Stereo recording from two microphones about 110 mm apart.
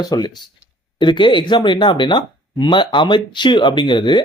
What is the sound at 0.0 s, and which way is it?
Speech, 35° left (ahead or behind).